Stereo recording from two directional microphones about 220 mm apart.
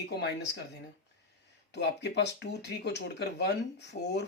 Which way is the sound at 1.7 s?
50° left (ahead or behind).